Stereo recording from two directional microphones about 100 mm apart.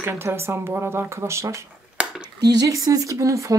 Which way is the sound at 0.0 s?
25° right (ahead or behind).